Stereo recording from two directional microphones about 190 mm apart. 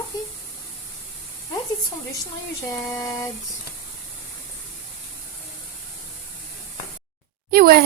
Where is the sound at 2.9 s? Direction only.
20° left (ahead or behind).